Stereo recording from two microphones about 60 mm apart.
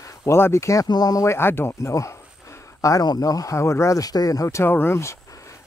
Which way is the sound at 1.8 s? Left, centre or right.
Left.